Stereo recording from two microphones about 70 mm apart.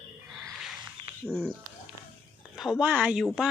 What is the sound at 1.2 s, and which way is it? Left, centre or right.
Speech, centre.